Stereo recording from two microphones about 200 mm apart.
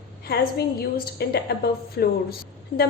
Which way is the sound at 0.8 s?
50° left (ahead or behind).